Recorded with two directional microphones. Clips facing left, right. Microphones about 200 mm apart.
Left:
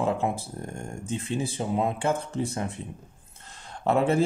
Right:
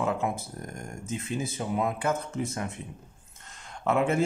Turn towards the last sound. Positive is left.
turn(degrees=35)  # may be behind; listen again after turning